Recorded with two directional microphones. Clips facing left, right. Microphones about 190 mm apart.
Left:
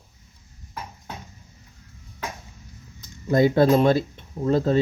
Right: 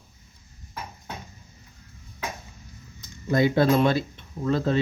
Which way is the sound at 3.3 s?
45° left (ahead or behind).